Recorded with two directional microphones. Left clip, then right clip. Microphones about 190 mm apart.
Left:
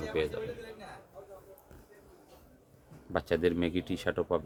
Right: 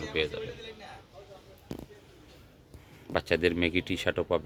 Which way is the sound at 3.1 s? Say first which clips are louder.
Right 2 dB; 20° right (ahead or behind).